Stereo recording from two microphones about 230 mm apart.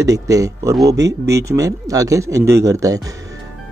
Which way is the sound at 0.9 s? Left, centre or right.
Right.